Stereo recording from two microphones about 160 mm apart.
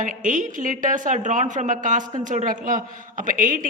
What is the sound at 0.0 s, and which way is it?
A woman's voice, 55° right (ahead or behind).